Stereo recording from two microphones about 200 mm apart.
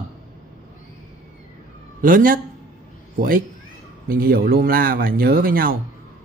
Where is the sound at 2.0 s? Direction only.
45° right (ahead or behind).